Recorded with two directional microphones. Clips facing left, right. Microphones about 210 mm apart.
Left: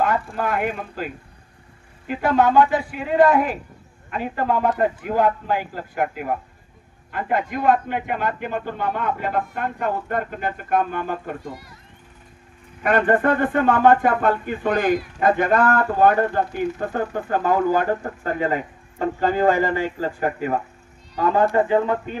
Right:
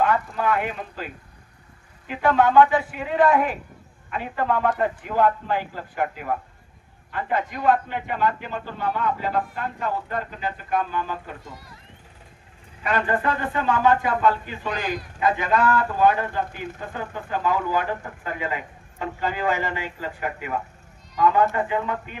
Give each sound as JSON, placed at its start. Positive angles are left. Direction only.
{"t": 0.1, "sound": "a man's voice", "side_deg": 45}
{"t": 7.1, "sound": "a man's voice", "side_deg": 50}
{"t": 12.8, "sound": "a man's voice", "side_deg": 50}